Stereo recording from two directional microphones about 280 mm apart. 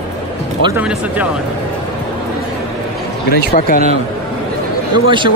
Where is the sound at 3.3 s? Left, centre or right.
Left.